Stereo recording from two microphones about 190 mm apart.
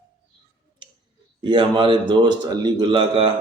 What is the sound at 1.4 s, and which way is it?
A man's voice, 25° right (ahead or behind).